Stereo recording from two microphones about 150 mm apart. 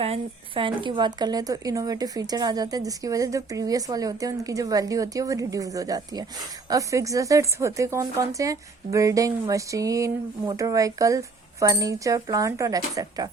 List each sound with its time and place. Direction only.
0.0 s speech: 40° right (ahead or behind)